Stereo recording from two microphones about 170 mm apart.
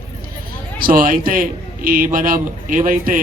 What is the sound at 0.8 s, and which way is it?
A man's voice, 55° right (ahead or behind).